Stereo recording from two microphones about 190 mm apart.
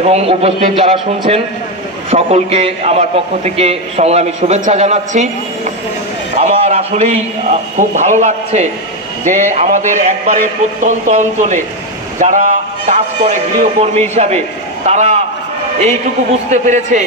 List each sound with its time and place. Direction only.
0.1 s a man's voice: 30° right (ahead or behind)
6.3 s a man's voice: 35° right (ahead or behind)
16.4 s a man's voice: 40° right (ahead or behind)